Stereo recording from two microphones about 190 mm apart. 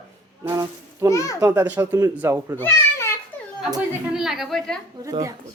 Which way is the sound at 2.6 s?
15° left (ahead or behind).